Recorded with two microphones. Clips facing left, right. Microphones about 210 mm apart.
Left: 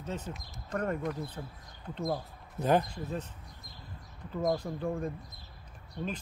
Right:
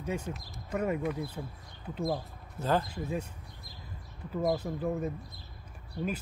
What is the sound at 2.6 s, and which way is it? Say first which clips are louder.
Speech: left 3 dB; 20° left (ahead or behind).